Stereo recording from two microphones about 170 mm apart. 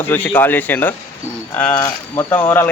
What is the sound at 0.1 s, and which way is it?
Speech, 10° left (ahead or behind).